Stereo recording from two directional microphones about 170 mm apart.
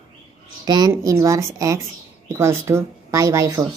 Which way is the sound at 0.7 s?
25° right (ahead or behind).